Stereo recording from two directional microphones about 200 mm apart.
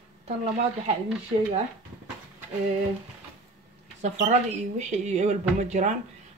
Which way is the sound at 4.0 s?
35° right (ahead or behind).